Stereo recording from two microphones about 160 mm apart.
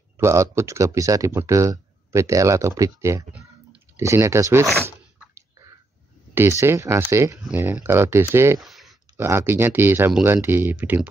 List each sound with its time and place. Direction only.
0.2 s speech: 20° right (ahead or behind)
6.3 s speech: 15° right (ahead or behind)
8.5 s a sound: centre (ahead or behind)
9.1 s speech: 15° right (ahead or behind)